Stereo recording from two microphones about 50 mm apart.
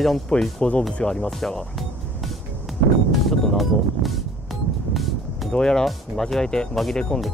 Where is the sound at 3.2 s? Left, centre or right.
Centre.